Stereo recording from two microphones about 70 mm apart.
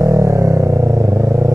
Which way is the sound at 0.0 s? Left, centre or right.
Right.